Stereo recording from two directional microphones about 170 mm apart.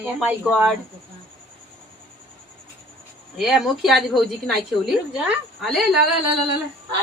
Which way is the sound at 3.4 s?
Centre (ahead or behind).